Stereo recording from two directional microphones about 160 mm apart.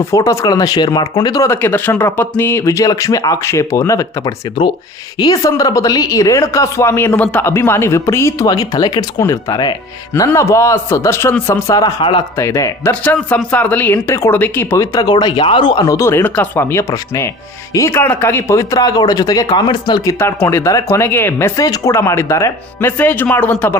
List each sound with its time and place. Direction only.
0.1 s a woman's voice: 20° left (ahead or behind)
5.2 s a woman's voice: 25° left (ahead or behind)
11.7 s a woman's voice: 25° left (ahead or behind)
12.4 s a woman's voice: 20° left (ahead or behind)
20.1 s speech: 15° left (ahead or behind)